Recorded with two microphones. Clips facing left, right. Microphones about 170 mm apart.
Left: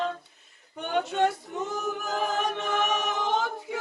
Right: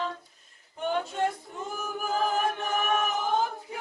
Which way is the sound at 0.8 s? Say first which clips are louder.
Left 3 dB; 75° left (ahead or behind).